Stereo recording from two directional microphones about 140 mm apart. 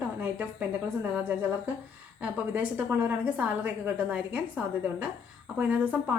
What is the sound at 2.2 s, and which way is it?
A woman's voice, 10° right (ahead or behind).